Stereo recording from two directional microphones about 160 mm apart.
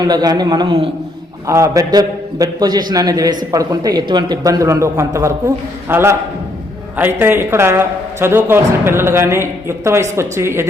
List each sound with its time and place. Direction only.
0.0 s speech: 25° right (ahead or behind)
1.5 s a man's voice: 20° right (ahead or behind)
7.2 s a man's voice: 15° right (ahead or behind)